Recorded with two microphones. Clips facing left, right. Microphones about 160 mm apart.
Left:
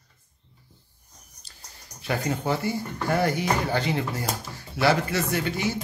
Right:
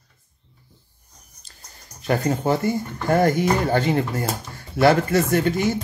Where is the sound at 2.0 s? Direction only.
45° right (ahead or behind).